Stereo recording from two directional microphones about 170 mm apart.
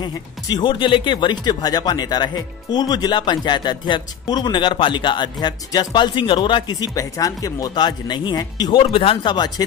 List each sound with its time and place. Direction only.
0.0 s speech: 25° left (ahead or behind)